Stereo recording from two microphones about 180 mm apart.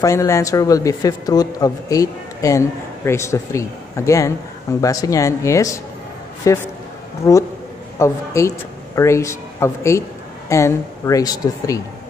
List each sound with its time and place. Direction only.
0.0 s a man's voice: 15° left (ahead or behind)